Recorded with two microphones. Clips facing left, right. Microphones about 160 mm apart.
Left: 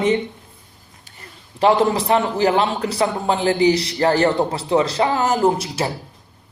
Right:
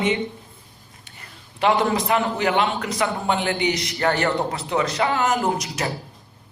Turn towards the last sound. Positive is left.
turn(degrees=30)  # may be behind; listen again after turning